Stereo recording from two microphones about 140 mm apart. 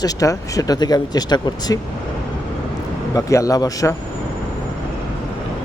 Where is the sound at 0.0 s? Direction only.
25° left (ahead or behind).